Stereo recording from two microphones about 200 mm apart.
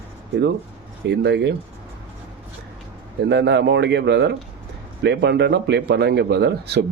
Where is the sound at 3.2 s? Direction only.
55° right (ahead or behind).